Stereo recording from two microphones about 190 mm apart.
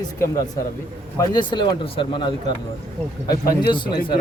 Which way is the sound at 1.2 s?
25° left (ahead or behind).